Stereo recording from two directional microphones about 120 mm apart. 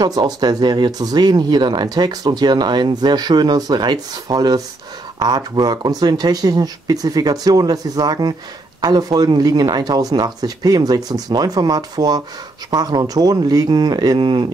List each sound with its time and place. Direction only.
0.0 s speech: 35° right (ahead or behind)